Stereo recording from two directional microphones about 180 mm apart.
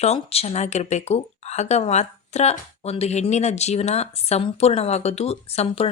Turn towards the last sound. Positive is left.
turn(degrees=35)  # may be behind; listen again after turning